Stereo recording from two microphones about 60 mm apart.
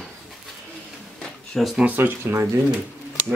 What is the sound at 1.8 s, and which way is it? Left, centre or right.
Speech, right.